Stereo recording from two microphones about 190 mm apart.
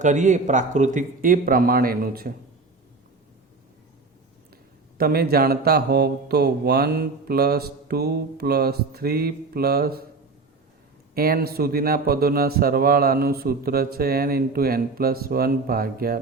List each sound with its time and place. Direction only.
0.0 s speech: 40° right (ahead or behind)
4.9 s speech: 55° right (ahead or behind)
11.1 s speech: 50° right (ahead or behind)